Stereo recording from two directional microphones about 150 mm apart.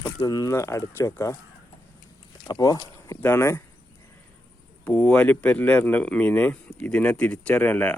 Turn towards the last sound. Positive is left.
turn(degrees=10)  # may be behind; listen again after turning